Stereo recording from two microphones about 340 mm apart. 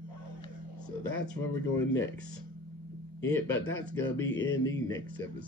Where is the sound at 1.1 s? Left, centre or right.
Left.